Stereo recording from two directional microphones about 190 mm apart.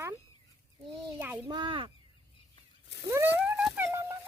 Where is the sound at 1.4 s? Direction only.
25° right (ahead or behind).